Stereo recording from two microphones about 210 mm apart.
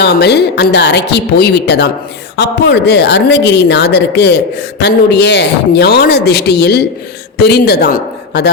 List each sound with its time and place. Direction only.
0.0 s a man's voice: 50° left (ahead or behind)